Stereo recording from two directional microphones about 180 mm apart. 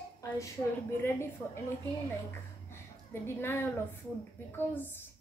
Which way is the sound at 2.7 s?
15° left (ahead or behind).